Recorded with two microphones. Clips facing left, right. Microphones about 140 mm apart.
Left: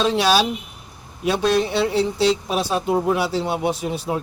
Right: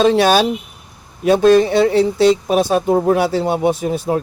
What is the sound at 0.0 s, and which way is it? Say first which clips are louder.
Speech: right 6 dB; 50° right (ahead or behind).